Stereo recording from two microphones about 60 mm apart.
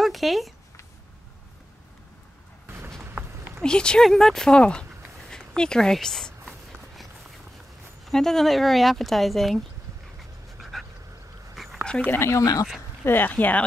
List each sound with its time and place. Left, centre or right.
0.0 s a sound: centre
3.6 s speech: centre
8.0 s speech: centre
10.6 s a sound: centre
11.5 s dog: centre
12.2 s speech: left
13.0 s speech: left